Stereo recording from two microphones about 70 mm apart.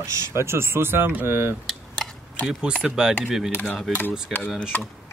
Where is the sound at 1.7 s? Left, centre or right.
Centre.